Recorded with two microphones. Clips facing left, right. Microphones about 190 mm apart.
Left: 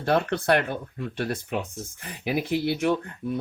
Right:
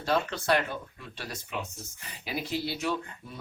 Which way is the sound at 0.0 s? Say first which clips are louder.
Left 5 dB; 60° left (ahead or behind).